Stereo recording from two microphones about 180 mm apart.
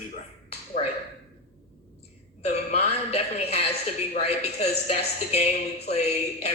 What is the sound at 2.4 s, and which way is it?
Speech, 35° left (ahead or behind).